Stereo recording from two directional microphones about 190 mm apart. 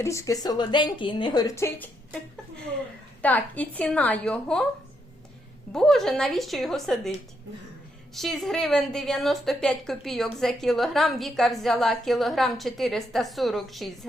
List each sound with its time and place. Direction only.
0.0 s speech: 15° left (ahead or behind)
3.2 s a woman's voice: 10° left (ahead or behind)
5.7 s a woman's voice: centre (ahead or behind)
8.1 s a woman's voice: centre (ahead or behind)